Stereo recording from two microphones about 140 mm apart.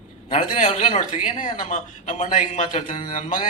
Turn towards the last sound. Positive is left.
turn(degrees=70)  # may be behind; listen again after turning